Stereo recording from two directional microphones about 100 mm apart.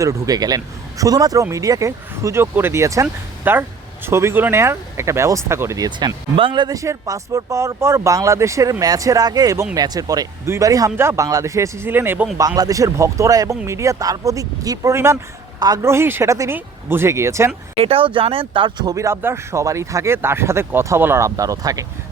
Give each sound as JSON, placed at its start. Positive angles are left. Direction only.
{"t": 0.0, "sound": "speech", "side_deg": -35}
{"t": 6.3, "sound": "a man's voice", "side_deg": -55}
{"t": 6.7, "sound": "speech", "side_deg": -35}
{"t": 12.4, "sound": "speech", "side_deg": -40}
{"t": 14.9, "sound": "speech", "side_deg": -25}
{"t": 15.5, "sound": "a man's voice", "side_deg": -45}
{"t": 15.8, "sound": "speech", "side_deg": -25}
{"t": 17.8, "sound": "speech", "side_deg": -65}
{"t": 18.9, "sound": "speech", "side_deg": -30}